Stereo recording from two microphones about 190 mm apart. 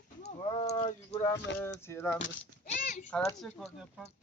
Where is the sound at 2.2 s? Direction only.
45° left (ahead or behind).